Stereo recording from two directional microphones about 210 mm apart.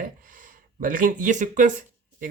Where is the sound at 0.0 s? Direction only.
40° right (ahead or behind).